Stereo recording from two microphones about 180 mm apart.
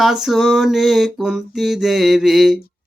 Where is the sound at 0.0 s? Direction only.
Centre (ahead or behind).